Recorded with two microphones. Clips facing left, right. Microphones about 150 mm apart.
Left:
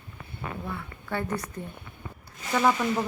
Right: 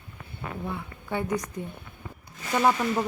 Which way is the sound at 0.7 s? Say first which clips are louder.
Right 3 dB; 15° right (ahead or behind).